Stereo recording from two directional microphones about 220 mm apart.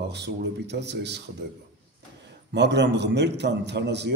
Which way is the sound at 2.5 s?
50° right (ahead or behind).